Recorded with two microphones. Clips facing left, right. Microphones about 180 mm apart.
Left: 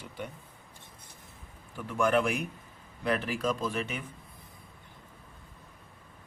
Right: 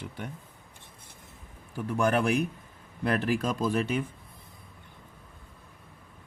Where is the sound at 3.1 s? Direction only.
40° right (ahead or behind).